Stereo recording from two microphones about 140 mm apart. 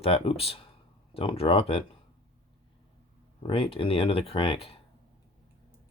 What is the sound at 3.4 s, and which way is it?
Speech, 40° left (ahead or behind).